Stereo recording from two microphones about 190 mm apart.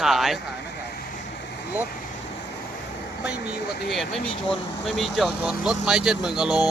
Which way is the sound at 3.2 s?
5° right (ahead or behind).